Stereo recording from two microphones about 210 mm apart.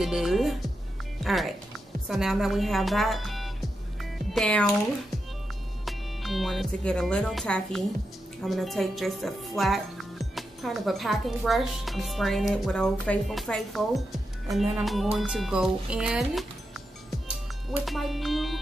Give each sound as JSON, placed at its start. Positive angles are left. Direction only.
{"t": 0.0, "sound": "speech", "side_deg": 0}
{"t": 5.9, "sound": "speech", "side_deg": 0}
{"t": 17.6, "sound": "speech", "side_deg": 0}